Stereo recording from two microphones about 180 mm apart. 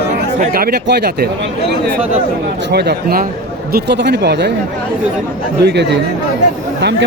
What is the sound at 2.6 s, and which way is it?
Speech, 70° right (ahead or behind).